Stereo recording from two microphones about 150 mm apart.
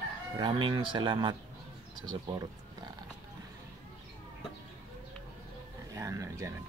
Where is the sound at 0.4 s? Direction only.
35° right (ahead or behind).